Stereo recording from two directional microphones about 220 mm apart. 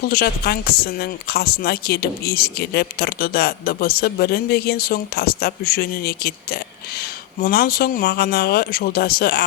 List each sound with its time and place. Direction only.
0.1 s a woman's voice: 45° left (ahead or behind)